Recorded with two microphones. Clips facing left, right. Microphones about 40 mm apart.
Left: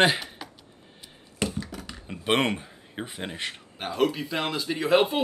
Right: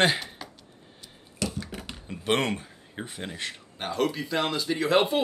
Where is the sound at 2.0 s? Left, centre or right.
Left.